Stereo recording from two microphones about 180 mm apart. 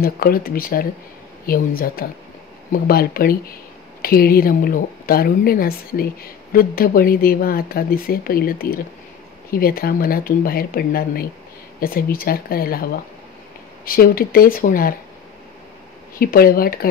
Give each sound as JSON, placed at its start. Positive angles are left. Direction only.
{"t": 0.0, "sound": "speech", "side_deg": 55}
{"t": 16.2, "sound": "speech", "side_deg": 55}